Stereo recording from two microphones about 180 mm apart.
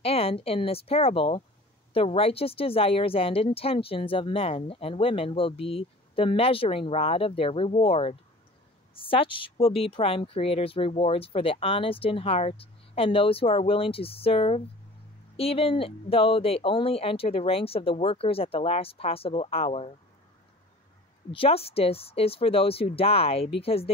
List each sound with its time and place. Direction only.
0.0 s speech: 30° left (ahead or behind)
21.3 s speech: 30° left (ahead or behind)